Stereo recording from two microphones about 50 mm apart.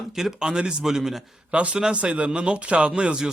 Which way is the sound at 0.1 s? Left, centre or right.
Centre.